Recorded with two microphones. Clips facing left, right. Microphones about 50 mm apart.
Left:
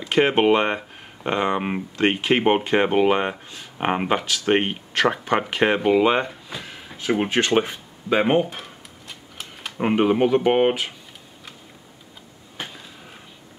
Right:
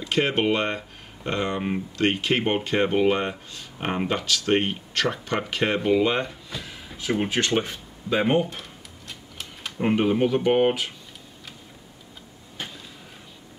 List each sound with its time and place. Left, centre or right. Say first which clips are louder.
0.1 s speech: left 5 dB; left
6.2 s drawer open or close: left 2 dB; centre
7.2 s a sound: left 4 dB; centre
9.8 s speech: left 3 dB; centre